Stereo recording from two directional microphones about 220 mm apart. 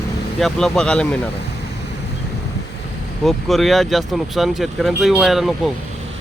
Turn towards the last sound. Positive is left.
turn(degrees=0)  # may be behind; listen again after turning